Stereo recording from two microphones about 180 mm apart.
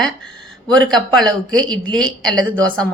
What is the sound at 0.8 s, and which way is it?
Speech, 5° left (ahead or behind).